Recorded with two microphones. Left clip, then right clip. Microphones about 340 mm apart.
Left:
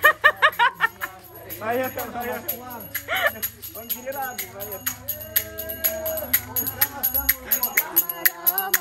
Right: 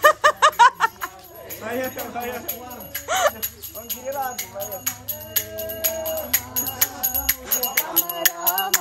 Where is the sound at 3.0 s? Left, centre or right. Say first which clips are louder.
Right 3 dB; centre.